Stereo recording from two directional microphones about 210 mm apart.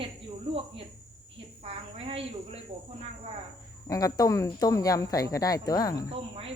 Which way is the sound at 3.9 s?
15° left (ahead or behind).